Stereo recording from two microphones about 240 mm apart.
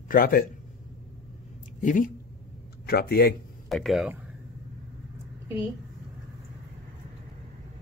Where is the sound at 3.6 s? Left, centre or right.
Centre.